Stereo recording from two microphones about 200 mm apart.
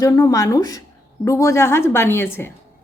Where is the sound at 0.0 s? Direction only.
15° left (ahead or behind).